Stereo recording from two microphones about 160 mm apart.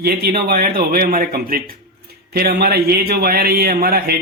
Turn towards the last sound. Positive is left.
turn(degrees=-70)  # may be behind; listen again after turning